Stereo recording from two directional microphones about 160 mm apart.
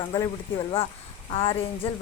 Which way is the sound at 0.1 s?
30° left (ahead or behind).